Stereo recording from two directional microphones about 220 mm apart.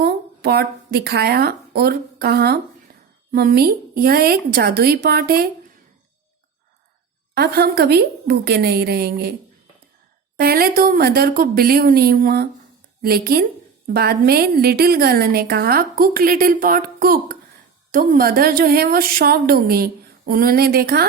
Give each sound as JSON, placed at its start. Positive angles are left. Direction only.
{"t": 0.0, "sound": "a woman's voice", "side_deg": -45}
{"t": 7.3, "sound": "a woman's voice", "side_deg": -45}
{"t": 10.3, "sound": "a woman's voice", "side_deg": -40}